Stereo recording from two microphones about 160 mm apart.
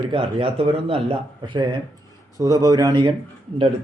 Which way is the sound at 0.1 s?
35° right (ahead or behind).